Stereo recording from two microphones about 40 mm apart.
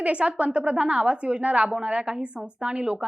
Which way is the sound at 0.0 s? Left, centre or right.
Right.